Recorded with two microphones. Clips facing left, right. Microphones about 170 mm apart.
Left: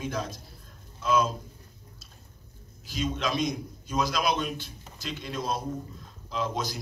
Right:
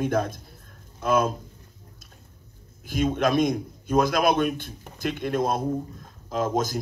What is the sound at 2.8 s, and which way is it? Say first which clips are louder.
A man's voice: right 7 dB; 55° right (ahead or behind).